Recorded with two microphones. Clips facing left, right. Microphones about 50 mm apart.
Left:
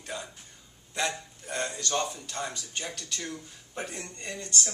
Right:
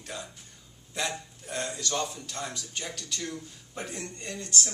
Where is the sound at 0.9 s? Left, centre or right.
Centre.